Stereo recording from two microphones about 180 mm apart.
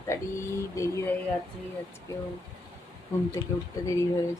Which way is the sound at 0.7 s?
15° left (ahead or behind).